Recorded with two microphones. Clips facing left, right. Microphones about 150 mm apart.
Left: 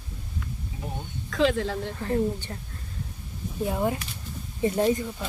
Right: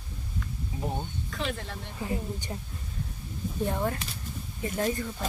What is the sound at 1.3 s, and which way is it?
Speech, 90° left.